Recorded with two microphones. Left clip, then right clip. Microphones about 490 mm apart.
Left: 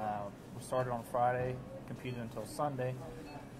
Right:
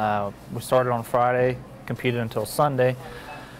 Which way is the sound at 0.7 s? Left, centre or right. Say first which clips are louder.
Right 15 dB; right.